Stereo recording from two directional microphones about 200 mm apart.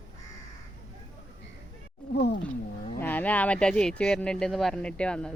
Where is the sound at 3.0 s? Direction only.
10° left (ahead or behind).